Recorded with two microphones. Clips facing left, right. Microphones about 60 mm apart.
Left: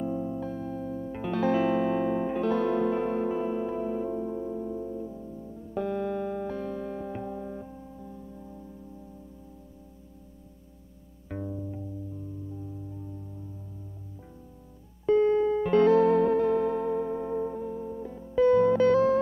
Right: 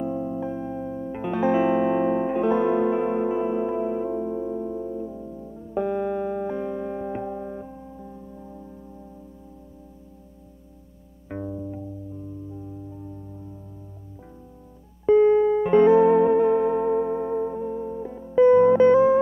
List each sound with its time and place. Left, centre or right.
0.0 s music: centre
11.2 s music: centre
15.0 s music: right